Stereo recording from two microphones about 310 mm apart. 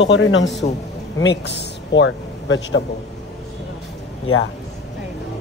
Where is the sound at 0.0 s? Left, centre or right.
Left.